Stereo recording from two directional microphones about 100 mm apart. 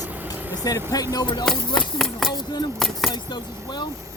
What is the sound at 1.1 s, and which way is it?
Speech, 45° left (ahead or behind).